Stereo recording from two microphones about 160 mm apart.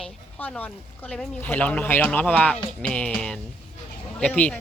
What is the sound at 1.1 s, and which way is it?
Speech, 10° left (ahead or behind).